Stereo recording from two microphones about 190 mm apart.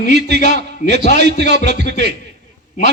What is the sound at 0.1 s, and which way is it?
Speech, 60° right (ahead or behind).